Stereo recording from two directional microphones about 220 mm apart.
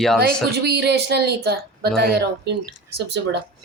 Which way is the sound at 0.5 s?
50° right (ahead or behind).